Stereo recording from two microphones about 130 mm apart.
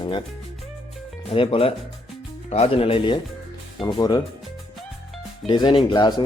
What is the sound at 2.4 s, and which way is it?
Speech, 55° left (ahead or behind).